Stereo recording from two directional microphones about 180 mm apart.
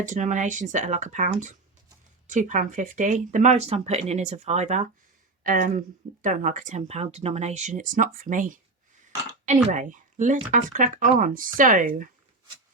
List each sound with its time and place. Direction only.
0.0 s speech: 45° right (ahead or behind)
9.6 s speech: 45° right (ahead or behind)